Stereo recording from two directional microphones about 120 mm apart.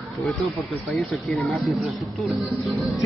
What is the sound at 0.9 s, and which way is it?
Speech, centre (ahead or behind).